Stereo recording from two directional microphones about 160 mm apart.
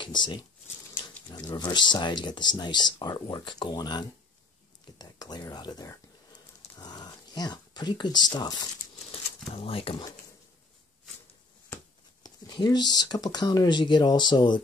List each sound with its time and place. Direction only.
0.0 s speech: 30° left (ahead or behind)
4.9 s a sound: 25° left (ahead or behind)
9.5 s speech: 35° left (ahead or behind)
11.7 s speech: 25° left (ahead or behind)